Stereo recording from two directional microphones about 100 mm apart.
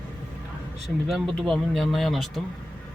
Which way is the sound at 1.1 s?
Centre (ahead or behind).